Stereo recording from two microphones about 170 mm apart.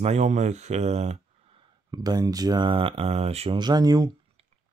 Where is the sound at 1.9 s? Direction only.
20° right (ahead or behind).